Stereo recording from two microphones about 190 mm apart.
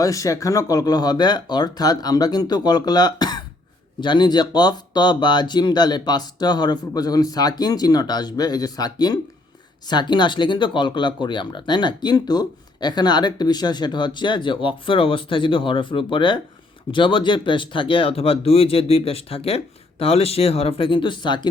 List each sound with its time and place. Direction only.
0.0 s speech: 15° left (ahead or behind)